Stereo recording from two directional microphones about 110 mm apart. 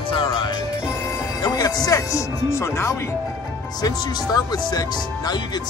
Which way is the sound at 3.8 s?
35° left (ahead or behind).